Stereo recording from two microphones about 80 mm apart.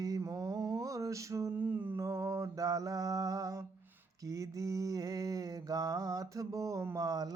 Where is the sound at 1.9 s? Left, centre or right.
Right.